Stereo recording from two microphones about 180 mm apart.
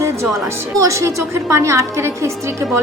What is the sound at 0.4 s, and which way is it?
A woman's voice, 15° right (ahead or behind).